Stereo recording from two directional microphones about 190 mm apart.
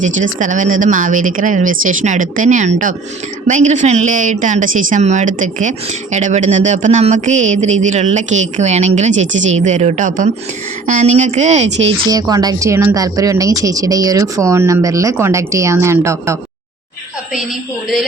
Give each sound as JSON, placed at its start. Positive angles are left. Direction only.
{"t": 0.0, "sound": "speech", "side_deg": -40}
{"t": 12.0, "sound": "speech", "side_deg": -20}